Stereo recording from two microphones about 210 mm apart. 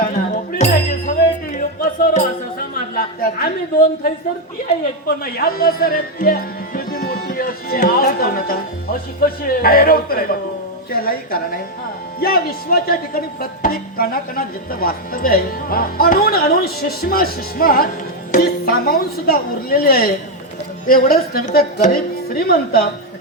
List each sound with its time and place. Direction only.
0.6 s music: 35° left (ahead or behind)
2.7 s a woman's voice: 40° left (ahead or behind)